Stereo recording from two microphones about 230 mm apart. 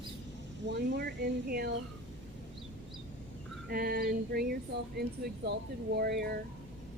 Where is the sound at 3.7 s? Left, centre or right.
Right.